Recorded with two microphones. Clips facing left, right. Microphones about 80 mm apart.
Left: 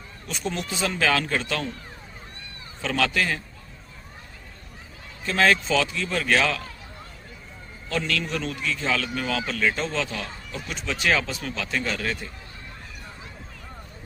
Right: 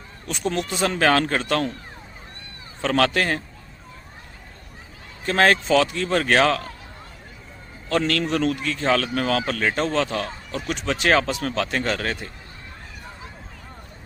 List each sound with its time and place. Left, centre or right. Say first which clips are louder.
0.3 s a man's voice: right 5 dB; right
2.8 s a man's voice: right 4 dB; right
5.2 s a man's voice: right 3 dB; right
7.9 s speech: right 6 dB; right